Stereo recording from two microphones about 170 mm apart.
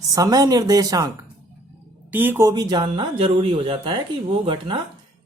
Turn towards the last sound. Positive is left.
turn(degrees=-30)  # may be behind; listen again after turning